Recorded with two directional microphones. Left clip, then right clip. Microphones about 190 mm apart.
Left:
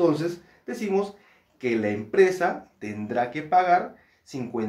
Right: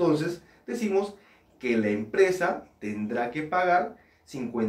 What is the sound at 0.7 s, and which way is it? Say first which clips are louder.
Speech: left 1 dB; 50° left (ahead or behind).